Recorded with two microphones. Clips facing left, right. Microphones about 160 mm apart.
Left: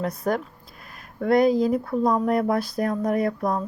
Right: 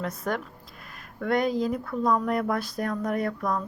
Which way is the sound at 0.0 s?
35° left (ahead or behind).